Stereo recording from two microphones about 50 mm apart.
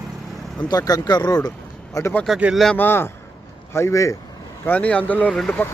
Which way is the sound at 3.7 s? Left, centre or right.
Left.